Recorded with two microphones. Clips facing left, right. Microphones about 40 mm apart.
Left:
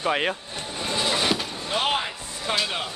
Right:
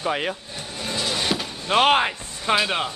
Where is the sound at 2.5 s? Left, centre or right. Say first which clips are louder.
Right 5 dB; centre.